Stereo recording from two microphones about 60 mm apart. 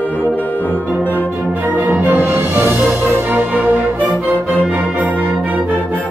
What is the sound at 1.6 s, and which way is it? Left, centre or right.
Music, right.